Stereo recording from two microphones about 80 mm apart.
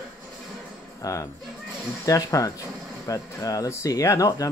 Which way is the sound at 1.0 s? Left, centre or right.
Left.